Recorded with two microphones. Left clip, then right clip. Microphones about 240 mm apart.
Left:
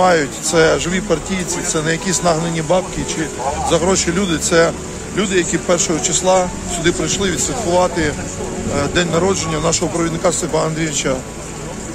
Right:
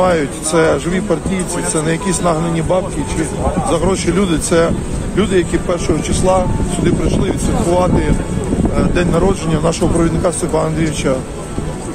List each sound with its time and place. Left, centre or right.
0.0 s speech: centre